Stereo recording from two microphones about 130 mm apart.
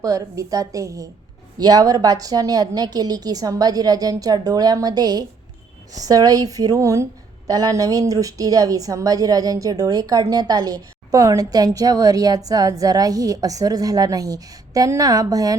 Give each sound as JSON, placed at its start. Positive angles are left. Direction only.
{"t": 0.0, "sound": "a woman's voice", "side_deg": -25}